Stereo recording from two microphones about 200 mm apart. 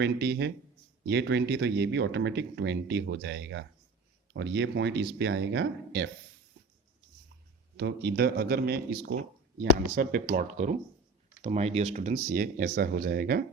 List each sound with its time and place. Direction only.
0.0 s speech: 55° right (ahead or behind)
7.8 s speech: 55° right (ahead or behind)